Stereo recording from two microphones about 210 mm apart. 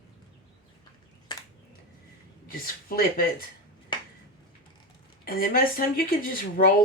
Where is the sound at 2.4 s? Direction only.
45° left (ahead or behind).